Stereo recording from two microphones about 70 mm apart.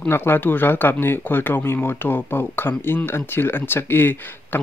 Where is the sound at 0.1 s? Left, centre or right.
Left.